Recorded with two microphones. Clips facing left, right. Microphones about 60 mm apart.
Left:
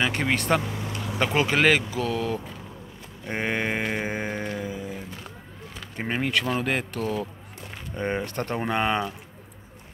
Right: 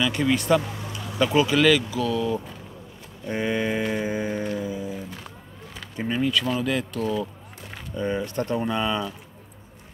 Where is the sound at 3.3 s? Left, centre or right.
Left.